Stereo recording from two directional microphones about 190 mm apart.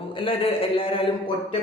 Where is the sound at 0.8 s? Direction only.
30° left (ahead or behind).